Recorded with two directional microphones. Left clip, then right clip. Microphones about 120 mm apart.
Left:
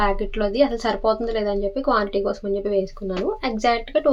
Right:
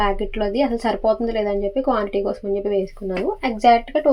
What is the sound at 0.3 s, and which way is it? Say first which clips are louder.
A woman's voice: left 1 dB; 10° right (ahead or behind).